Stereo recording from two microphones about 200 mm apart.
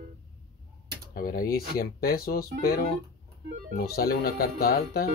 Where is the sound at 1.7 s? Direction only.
50° left (ahead or behind).